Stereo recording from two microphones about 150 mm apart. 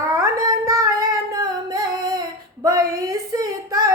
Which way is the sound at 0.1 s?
25° right (ahead or behind).